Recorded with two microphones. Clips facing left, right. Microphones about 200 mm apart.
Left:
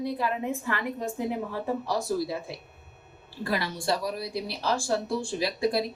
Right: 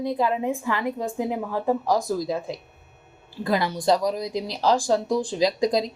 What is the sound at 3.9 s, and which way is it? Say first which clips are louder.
Speech: right 7 dB; 90° right.